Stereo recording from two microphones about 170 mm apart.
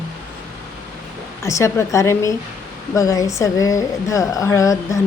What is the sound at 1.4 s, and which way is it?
A woman's voice, 15° left (ahead or behind).